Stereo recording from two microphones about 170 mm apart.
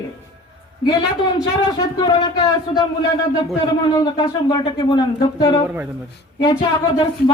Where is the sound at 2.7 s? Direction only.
35° left (ahead or behind).